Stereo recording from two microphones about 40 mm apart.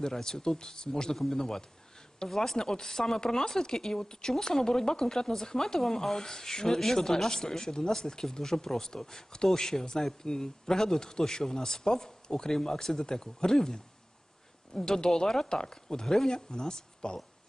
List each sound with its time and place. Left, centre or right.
0.0 s speech: centre
1.1 s speech: centre
1.4 s speech: centre
14.8 s speech: centre